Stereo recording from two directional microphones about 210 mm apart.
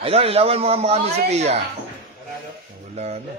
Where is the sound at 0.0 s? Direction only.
30° right (ahead or behind).